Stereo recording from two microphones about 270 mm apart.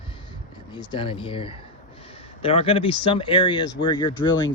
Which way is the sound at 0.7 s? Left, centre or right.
Centre.